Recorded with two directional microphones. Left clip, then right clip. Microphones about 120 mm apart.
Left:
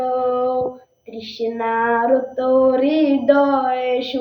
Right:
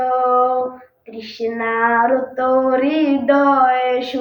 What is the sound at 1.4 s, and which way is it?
Female singing, 35° left (ahead or behind).